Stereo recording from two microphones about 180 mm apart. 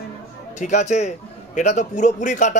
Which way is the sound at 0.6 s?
40° left (ahead or behind).